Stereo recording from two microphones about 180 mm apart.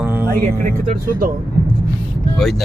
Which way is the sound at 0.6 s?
45° right (ahead or behind).